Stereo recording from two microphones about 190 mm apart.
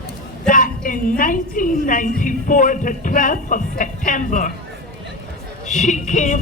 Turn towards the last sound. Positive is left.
turn(degrees=40)  # may be behind; listen again after turning